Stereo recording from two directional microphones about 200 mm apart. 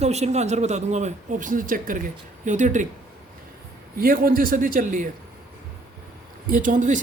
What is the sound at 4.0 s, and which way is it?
A man's voice, 45° right (ahead or behind).